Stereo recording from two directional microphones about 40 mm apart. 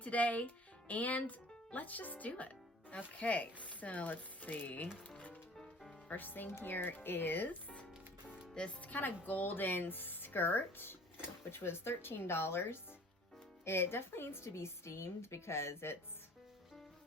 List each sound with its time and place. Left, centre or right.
0.0 s speech: left
5.0 s music: left
6.1 s speech: left
6.5 s speech: left
8.5 s speech: left
9.0 s speech: left
11.5 s a woman's voice: left